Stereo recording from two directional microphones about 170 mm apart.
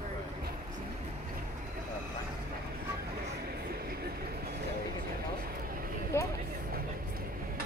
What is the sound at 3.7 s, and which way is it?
Vehicle, 65° right (ahead or behind).